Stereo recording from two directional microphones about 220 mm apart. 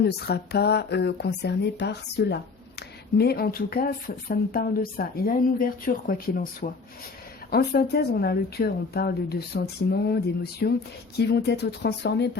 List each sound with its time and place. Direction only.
0.0 s speech: 45° left (ahead or behind)